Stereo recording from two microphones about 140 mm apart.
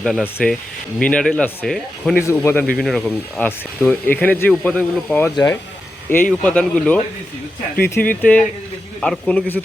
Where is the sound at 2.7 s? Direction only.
Centre (ahead or behind).